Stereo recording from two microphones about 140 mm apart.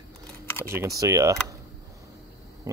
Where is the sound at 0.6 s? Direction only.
20° right (ahead or behind).